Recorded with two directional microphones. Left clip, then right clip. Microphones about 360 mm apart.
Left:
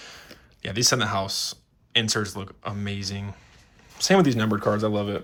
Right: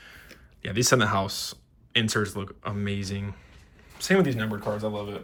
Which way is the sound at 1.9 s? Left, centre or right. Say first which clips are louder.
Left 2 dB; centre.